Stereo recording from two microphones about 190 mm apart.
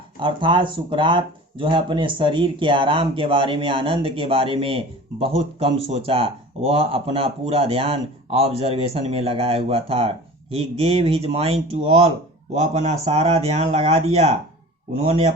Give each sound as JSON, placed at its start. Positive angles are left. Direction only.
{"t": 0.2, "sound": "speech", "side_deg": -25}